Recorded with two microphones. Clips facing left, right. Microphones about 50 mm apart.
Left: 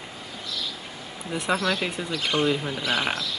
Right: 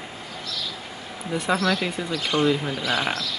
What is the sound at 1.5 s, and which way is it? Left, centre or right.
Speech, centre.